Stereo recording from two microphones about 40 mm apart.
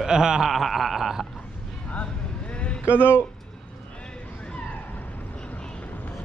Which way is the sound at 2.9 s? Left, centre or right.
Left.